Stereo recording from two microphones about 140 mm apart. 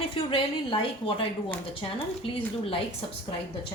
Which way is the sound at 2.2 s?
40° left (ahead or behind).